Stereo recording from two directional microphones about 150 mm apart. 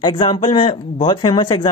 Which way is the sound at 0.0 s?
35° left (ahead or behind).